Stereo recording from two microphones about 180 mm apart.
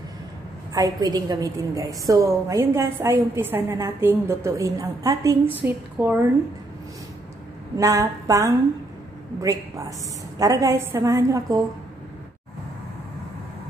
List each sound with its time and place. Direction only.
0.7 s a woman's voice: 20° right (ahead or behind)
7.7 s a woman's voice: 20° right (ahead or behind)